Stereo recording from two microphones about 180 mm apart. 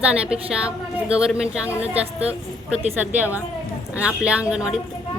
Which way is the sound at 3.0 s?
10° right (ahead or behind).